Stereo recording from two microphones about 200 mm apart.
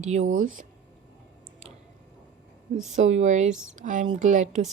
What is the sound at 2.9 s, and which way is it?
Speech, 35° right (ahead or behind).